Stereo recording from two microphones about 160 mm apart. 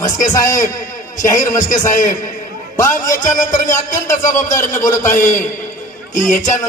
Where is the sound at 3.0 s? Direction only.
20° left (ahead or behind).